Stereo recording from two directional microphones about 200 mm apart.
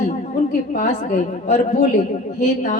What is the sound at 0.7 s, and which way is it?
Mantra, 40° left (ahead or behind).